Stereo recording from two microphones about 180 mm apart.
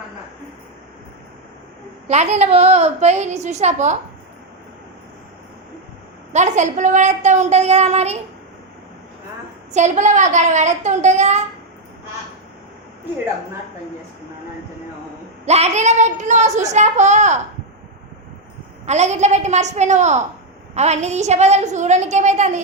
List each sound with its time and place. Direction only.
2.0 s a woman's voice: 40° right (ahead or behind)
6.3 s a woman's voice: 40° right (ahead or behind)
9.7 s a woman's voice: 40° right (ahead or behind)
15.4 s a woman's voice: 35° right (ahead or behind)
18.9 s a woman's voice: 40° right (ahead or behind)